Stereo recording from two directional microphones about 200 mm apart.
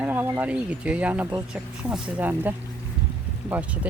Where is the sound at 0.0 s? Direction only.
10° right (ahead or behind).